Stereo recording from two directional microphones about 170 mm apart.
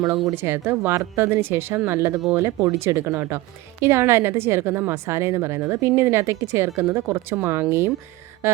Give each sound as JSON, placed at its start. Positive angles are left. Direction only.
{"t": 0.0, "sound": "a woman's voice", "side_deg": -15}